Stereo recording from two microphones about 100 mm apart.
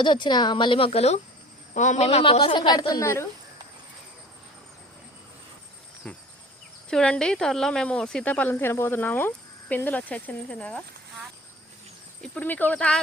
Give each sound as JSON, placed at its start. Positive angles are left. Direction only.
{"t": 0.0, "sound": "a woman's voice", "side_deg": 50}
{"t": 2.4, "sound": "a woman's voice", "side_deg": 45}
{"t": 6.9, "sound": "a woman's voice", "side_deg": 10}
{"t": 12.2, "sound": "a woman's voice", "side_deg": 15}